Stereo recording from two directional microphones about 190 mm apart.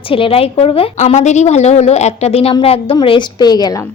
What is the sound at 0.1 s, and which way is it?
A woman's voice, 30° left (ahead or behind).